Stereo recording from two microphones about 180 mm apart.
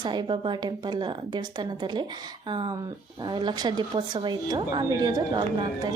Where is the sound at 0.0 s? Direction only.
25° right (ahead or behind).